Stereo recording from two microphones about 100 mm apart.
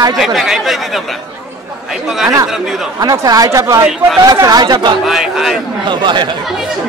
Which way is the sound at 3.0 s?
40° right (ahead or behind).